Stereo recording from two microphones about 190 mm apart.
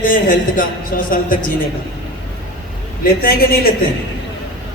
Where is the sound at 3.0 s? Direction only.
50° left (ahead or behind).